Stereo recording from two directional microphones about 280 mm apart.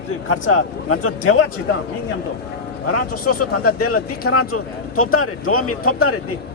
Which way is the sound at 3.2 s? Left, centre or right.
Left.